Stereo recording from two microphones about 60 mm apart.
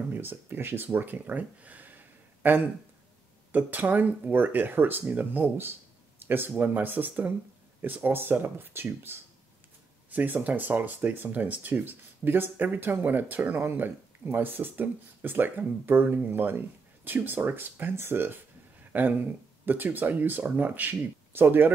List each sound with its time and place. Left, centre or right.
0.1 s speech: right
10.1 s speech: right